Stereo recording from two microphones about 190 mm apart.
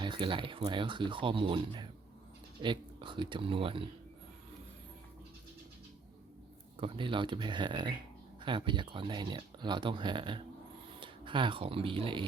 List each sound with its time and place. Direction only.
0.0 s speech: 25° right (ahead or behind)
6.7 s speech: 25° right (ahead or behind)